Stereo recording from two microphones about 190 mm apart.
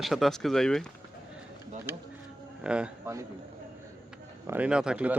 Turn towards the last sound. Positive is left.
turn(degrees=-5)  # may be behind; listen again after turning